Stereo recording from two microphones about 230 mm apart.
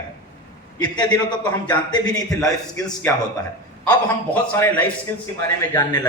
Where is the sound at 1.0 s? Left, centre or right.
Centre.